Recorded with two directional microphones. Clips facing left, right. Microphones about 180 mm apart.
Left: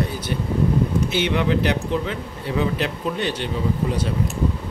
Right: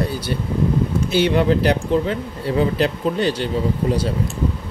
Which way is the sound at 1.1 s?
35° right (ahead or behind).